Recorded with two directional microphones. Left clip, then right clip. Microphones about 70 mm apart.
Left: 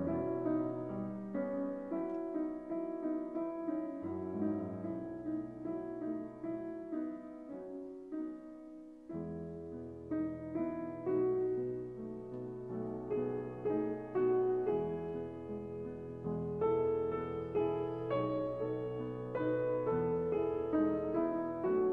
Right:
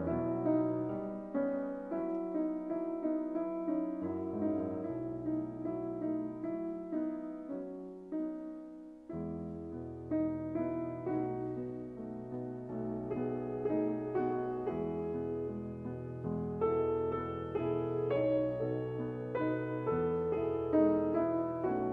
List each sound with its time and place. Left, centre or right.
0.0 s music: left
10.1 s music: left
12.8 s music: left
16.5 s music: left